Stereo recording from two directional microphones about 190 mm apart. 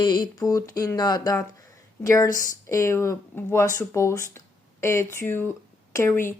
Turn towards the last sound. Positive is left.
turn(degrees=15)  # may be behind; listen again after turning